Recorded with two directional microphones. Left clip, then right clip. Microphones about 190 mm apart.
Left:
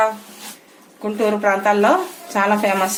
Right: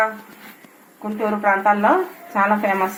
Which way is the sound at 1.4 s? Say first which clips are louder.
Right 1 dB; 25° left (ahead or behind).